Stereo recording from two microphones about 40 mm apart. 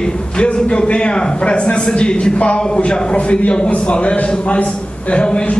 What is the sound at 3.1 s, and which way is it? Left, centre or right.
A man's voice, left.